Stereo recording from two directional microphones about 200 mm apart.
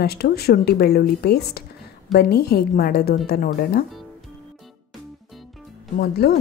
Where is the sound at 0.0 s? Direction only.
50° left (ahead or behind).